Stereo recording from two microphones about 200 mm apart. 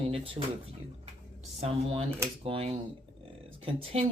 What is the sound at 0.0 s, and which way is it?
Speech, 30° right (ahead or behind).